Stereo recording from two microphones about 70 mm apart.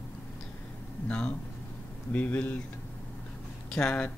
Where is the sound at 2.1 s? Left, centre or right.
Left.